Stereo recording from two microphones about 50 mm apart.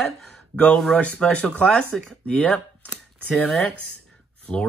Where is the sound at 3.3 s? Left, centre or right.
Centre.